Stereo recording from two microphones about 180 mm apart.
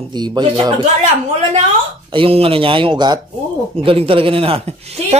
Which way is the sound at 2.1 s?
30° right (ahead or behind).